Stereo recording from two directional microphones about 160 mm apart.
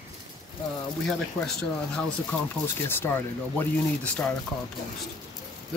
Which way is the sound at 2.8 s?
15° left (ahead or behind).